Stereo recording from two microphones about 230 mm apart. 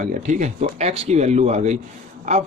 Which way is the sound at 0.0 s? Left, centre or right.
Right.